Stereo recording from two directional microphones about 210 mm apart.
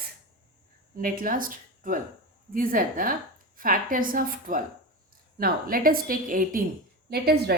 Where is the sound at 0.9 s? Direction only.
40° right (ahead or behind).